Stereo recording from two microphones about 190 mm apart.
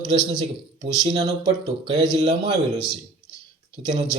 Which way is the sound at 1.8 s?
30° right (ahead or behind).